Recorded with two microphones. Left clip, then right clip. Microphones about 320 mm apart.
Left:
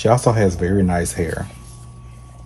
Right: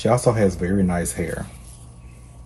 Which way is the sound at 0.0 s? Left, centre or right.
Centre.